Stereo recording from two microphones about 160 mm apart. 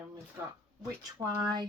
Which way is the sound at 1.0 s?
25° right (ahead or behind).